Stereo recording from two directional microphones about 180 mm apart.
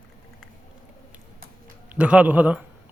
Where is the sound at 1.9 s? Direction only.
5° right (ahead or behind).